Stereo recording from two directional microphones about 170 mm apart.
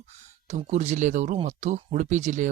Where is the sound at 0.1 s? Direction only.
40° right (ahead or behind).